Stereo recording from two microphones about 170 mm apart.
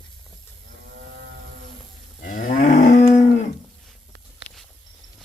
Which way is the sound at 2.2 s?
50° left (ahead or behind).